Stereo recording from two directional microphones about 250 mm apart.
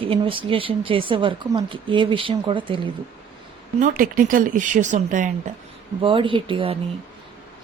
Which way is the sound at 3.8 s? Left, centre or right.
Right.